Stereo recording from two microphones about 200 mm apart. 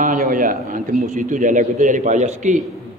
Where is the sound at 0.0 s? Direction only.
40° right (ahead or behind).